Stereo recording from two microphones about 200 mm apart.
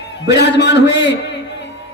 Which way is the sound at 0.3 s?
60° left (ahead or behind).